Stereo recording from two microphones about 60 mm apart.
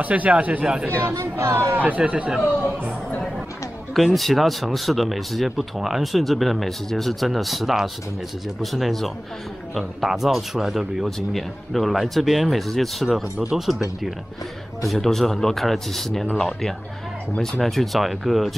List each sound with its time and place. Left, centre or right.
0.0 s speech: right
1.1 s speech: right
1.7 s speech: right
3.9 s speech: centre
11.1 s speech: centre